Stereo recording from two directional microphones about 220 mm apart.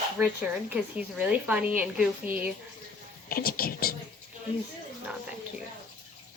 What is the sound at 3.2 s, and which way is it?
Speech, 40° left (ahead or behind).